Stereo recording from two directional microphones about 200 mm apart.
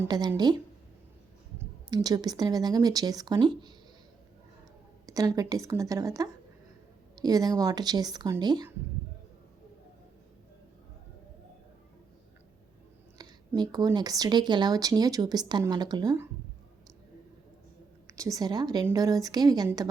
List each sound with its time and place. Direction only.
0.0 s speech: 20° right (ahead or behind)
1.5 s speech: 20° right (ahead or behind)
5.0 s a woman's voice: 15° right (ahead or behind)
13.1 s speech: 20° right (ahead or behind)
18.2 s speech: 15° right (ahead or behind)